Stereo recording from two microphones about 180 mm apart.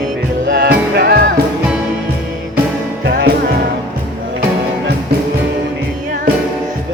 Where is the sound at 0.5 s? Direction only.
65° right (ahead or behind).